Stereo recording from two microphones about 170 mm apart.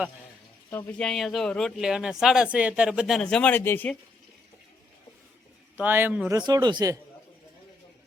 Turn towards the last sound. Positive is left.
turn(degrees=-20)  # may be behind; listen again after turning